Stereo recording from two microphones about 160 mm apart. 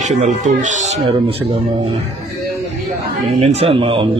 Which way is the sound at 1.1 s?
35° right (ahead or behind).